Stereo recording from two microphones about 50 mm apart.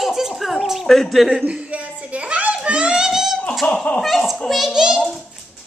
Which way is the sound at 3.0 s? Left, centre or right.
Centre.